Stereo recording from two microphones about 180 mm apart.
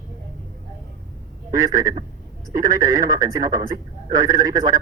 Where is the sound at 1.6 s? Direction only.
20° right (ahead or behind).